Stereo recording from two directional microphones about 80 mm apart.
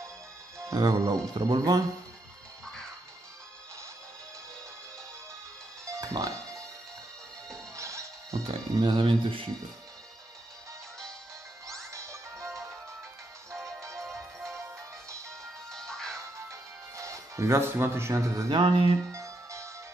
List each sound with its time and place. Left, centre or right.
0.7 s speech: right
5.9 s music: right
7.7 s music: right
8.5 s speech: right
11.9 s music: right
13.7 s music: right
15.7 s music: centre
16.4 s music: right
18.5 s music: right
19.1 s music: right